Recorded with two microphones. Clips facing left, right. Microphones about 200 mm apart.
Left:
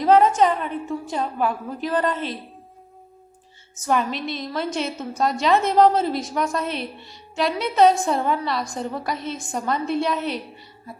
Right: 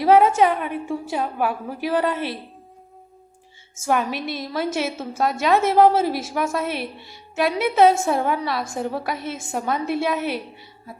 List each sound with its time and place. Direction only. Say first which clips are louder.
0.0 s a woman's voice: right 1 dB; 10° right (ahead or behind)
3.8 s a woman's voice: even; 5° right (ahead or behind)